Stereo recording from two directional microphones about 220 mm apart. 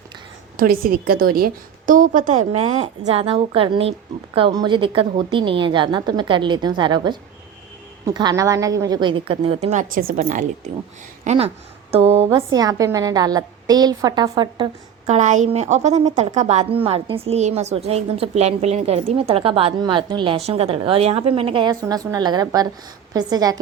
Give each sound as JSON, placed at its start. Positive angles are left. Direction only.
{"t": 0.5, "sound": "a woman's voice", "side_deg": -40}
{"t": 12.3, "sound": "a woman's voice", "side_deg": -15}
{"t": 15.0, "sound": "a woman's voice", "side_deg": -30}